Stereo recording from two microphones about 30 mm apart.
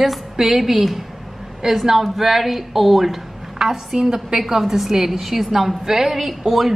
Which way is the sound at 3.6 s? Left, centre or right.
Centre.